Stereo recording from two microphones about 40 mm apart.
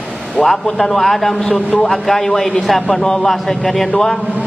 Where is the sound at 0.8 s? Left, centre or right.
Centre.